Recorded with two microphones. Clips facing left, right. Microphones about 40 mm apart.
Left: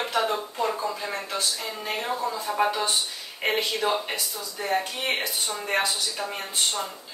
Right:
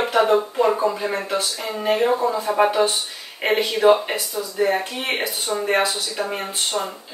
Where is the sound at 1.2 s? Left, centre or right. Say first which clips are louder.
Right 6 dB; right.